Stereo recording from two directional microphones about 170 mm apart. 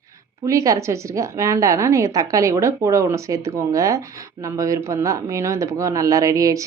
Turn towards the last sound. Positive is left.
turn(degrees=-20)  # may be behind; listen again after turning